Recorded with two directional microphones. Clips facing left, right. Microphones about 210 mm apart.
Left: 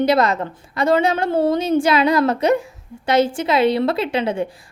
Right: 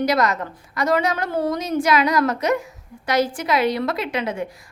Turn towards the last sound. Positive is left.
turn(degrees=30)  # may be behind; listen again after turning